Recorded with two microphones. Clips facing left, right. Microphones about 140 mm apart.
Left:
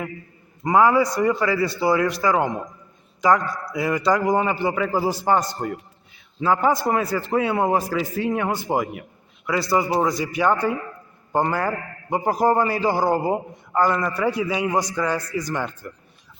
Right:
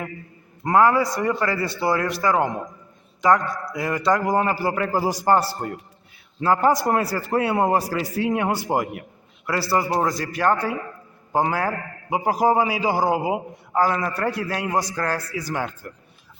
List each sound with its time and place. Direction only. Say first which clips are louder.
0.6 s a man's voice: left 1 dB; centre (ahead or behind)